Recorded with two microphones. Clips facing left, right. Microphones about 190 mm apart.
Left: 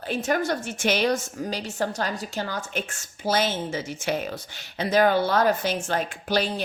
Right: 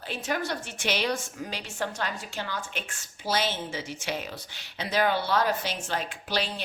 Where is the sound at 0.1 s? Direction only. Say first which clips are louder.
Left 6 dB; 45° left (ahead or behind).